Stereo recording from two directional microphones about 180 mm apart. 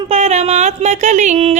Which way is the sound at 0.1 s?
40° right (ahead or behind).